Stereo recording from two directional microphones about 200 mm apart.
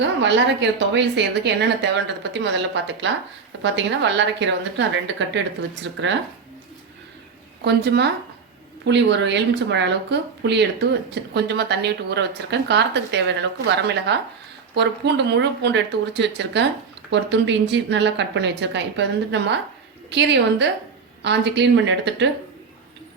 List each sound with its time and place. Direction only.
0.0 s speech: 65° right (ahead or behind)
7.6 s speech: 55° right (ahead or behind)